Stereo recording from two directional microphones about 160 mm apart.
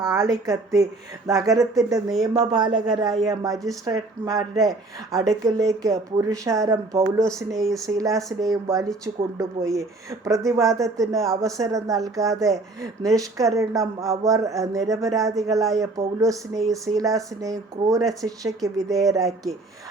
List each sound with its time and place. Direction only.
0.0 s a woman's voice: 20° right (ahead or behind)
18.0 s speech: centre (ahead or behind)
18.3 s speech: 20° right (ahead or behind)